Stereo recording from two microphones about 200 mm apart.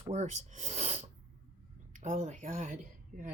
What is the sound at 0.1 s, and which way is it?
Speech, 35° right (ahead or behind).